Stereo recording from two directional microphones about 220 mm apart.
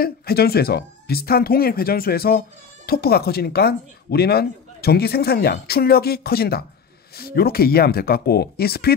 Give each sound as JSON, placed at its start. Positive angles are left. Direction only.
{"t": 0.0, "sound": "speech", "side_deg": 45}